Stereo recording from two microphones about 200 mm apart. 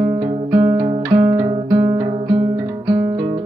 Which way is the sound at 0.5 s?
25° right (ahead or behind).